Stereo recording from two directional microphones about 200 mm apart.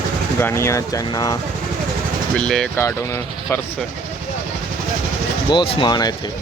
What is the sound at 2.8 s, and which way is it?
Speech, 15° left (ahead or behind).